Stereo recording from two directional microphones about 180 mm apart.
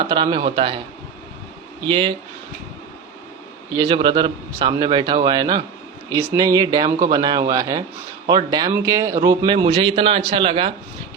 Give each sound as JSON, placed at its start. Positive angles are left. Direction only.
{"t": 0.0, "sound": "a man's voice", "side_deg": -25}
{"t": 1.8, "sound": "a man's voice", "side_deg": -30}
{"t": 3.7, "sound": "a man's voice", "side_deg": -25}